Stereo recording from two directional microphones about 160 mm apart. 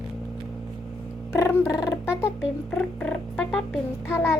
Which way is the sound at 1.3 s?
15° left (ahead or behind).